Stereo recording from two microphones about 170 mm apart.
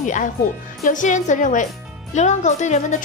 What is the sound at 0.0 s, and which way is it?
A woman's voice, 50° left (ahead or behind).